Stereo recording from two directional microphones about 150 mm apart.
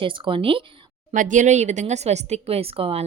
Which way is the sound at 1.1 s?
60° right (ahead or behind).